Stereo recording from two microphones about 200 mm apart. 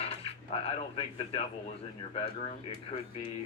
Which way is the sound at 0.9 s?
25° left (ahead or behind).